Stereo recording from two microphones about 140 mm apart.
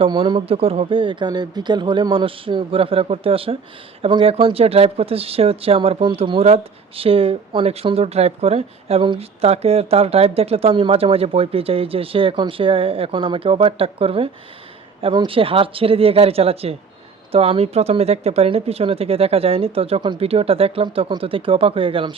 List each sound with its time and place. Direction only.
0.0 s speech: 35° right (ahead or behind)